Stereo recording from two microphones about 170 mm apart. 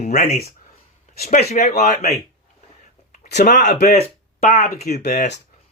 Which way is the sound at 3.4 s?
50° left (ahead or behind).